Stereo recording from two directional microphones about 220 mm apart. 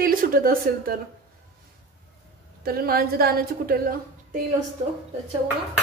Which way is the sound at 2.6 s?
45° right (ahead or behind).